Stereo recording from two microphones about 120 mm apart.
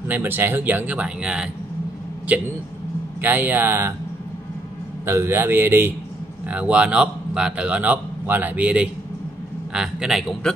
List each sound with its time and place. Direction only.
0.1 s speech: 20° right (ahead or behind)
3.2 s speech: 15° right (ahead or behind)
5.0 s a man's voice: 20° right (ahead or behind); by 10.5 s centre (ahead or behind)